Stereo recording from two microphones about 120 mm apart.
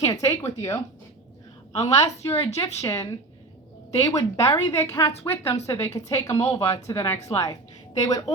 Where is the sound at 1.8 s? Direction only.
25° left (ahead or behind).